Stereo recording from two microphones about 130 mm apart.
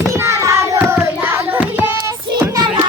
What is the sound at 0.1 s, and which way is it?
Child singing, 20° right (ahead or behind).